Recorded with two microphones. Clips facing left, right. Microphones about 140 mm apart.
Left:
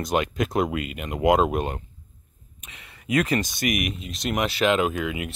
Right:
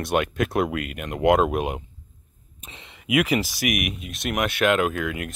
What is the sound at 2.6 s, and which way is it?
Speech, 30° right (ahead or behind).